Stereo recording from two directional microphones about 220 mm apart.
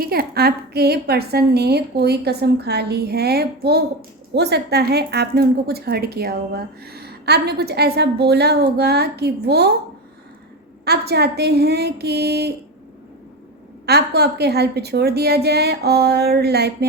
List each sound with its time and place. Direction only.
0.0 s a woman's voice: 45° right (ahead or behind)
10.8 s a woman's voice: 45° right (ahead or behind)
13.8 s a woman's voice: 45° right (ahead or behind)